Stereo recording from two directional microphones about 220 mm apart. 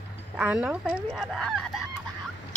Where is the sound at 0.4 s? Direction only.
5° right (ahead or behind).